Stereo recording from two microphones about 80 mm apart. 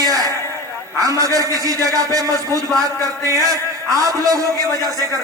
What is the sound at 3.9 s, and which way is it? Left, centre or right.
Speech, right.